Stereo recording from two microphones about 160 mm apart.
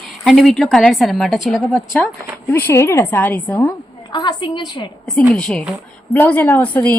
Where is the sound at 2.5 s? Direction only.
15° left (ahead or behind).